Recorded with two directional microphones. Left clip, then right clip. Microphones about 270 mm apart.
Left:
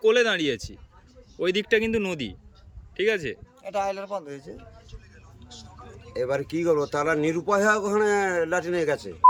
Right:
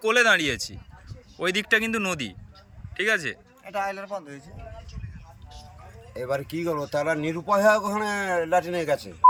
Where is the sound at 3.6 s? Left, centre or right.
Left.